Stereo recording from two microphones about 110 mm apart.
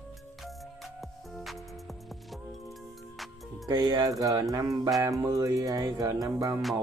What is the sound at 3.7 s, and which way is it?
Music, 35° right (ahead or behind).